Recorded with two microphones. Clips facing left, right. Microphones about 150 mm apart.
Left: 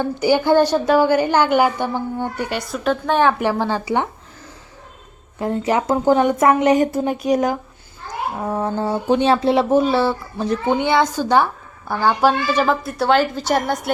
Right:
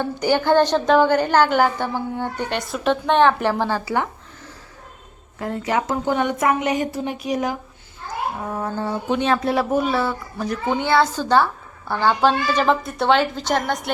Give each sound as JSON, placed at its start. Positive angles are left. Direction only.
{"t": 0.0, "sound": "a woman's voice", "side_deg": 10}
{"t": 5.4, "sound": "a woman's voice", "side_deg": 30}
{"t": 8.6, "sound": "a woman's voice", "side_deg": 30}